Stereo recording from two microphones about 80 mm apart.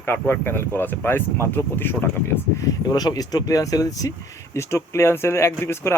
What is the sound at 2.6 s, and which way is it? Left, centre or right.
Speech, left.